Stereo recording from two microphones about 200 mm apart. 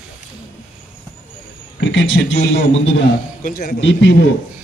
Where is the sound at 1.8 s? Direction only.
65° left (ahead or behind).